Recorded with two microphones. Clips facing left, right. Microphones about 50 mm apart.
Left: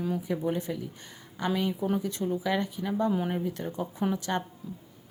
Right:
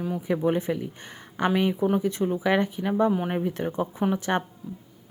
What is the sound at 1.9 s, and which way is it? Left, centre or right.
Speech, right.